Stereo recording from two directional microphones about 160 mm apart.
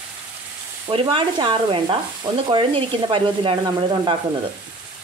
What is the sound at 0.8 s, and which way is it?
Speech, 30° right (ahead or behind).